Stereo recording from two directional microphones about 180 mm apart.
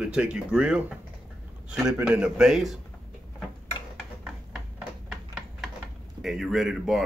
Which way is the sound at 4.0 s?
Centre (ahead or behind).